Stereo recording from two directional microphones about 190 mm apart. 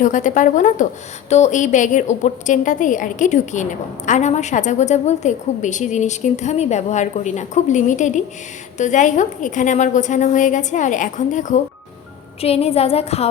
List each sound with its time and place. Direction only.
0.0 s a woman's voice: 40° left (ahead or behind)